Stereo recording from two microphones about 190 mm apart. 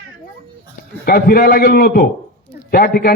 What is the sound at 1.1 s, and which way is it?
A man's voice, 55° left (ahead or behind).